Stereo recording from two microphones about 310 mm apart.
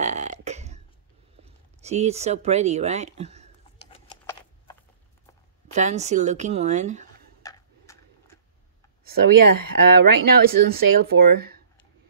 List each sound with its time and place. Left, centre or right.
0.0 s burping: right
1.4 s speech: right
3.9 s a sound: centre
5.7 s a woman's voice: right
7.4 s tick-tock: centre
9.2 s speech: right
10.4 s a woman's voice: right